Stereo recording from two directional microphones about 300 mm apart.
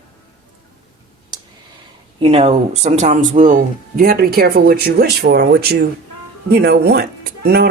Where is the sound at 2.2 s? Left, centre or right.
Right.